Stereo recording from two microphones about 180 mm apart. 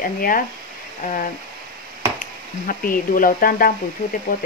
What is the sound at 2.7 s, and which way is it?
Speech, 50° left (ahead or behind).